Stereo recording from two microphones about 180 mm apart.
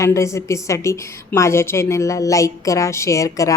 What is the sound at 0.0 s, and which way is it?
A woman's voice, 15° left (ahead or behind).